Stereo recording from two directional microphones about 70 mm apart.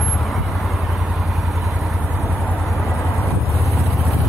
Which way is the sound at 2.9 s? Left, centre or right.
Left.